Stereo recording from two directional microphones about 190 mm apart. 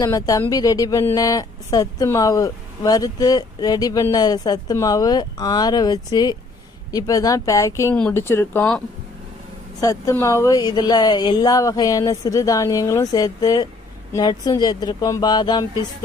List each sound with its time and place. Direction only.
0.0 s speech: 20° left (ahead or behind)
9.8 s speech: 15° left (ahead or behind)